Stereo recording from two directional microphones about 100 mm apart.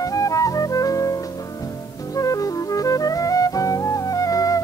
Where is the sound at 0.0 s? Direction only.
35° left (ahead or behind).